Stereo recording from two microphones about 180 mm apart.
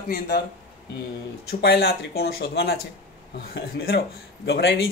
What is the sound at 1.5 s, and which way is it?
Speech, 65° left (ahead or behind).